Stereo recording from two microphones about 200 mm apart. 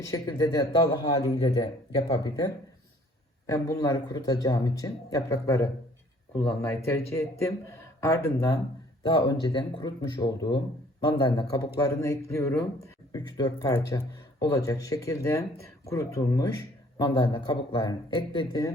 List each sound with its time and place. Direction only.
0.0 s speech: 15° left (ahead or behind)
2.0 s speech: 25° left (ahead or behind)